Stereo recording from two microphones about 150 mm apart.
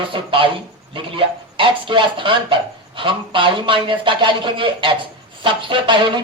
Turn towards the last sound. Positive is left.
turn(degrees=-30)  # may be behind; listen again after turning